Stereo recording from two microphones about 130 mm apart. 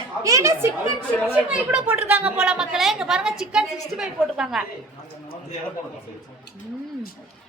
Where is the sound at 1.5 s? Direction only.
10° right (ahead or behind).